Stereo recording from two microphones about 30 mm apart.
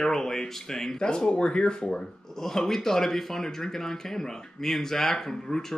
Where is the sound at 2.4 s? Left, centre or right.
Centre.